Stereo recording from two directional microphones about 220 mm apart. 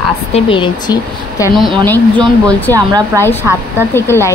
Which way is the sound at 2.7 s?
15° right (ahead or behind).